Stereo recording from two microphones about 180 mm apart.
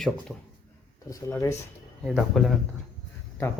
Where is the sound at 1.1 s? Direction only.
15° left (ahead or behind).